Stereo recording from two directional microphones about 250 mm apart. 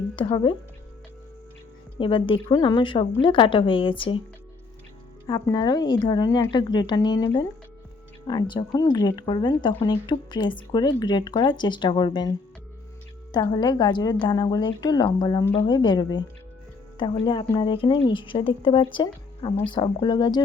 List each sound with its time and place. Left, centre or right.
0.2 s a woman's voice: centre
2.0 s a woman's voice: left
5.2 s speech: centre
13.3 s a woman's voice: centre